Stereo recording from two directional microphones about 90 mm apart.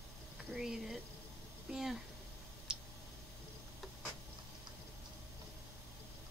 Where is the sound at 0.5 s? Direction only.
5° right (ahead or behind).